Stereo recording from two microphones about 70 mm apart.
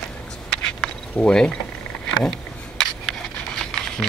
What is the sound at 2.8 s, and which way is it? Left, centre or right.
Camera, centre.